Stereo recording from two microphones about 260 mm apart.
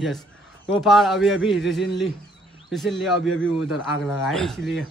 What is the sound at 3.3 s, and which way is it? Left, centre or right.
Speech, left.